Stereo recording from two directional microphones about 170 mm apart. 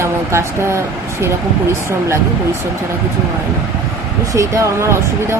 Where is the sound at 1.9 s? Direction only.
15° right (ahead or behind).